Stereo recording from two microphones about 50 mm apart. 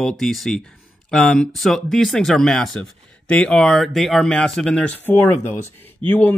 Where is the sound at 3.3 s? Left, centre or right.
Left.